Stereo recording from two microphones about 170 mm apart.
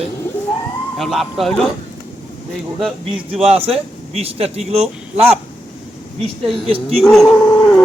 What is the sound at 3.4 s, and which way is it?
Speech, 35° right (ahead or behind).